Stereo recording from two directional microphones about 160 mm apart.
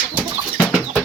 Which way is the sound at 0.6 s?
10° right (ahead or behind).